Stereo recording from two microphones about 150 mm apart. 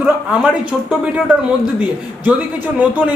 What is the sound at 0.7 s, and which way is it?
A woman's voice, 5° right (ahead or behind).